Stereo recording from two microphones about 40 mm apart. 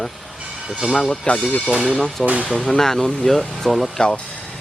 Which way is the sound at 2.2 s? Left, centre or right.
Right.